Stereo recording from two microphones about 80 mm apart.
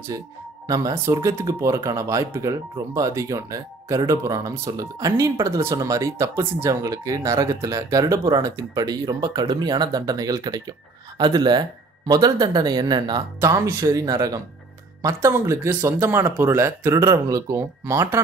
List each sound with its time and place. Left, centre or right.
0.7 s speech: right
11.1 s speech: right
13.4 s speech: right
15.2 s speech: right
16.9 s speech: right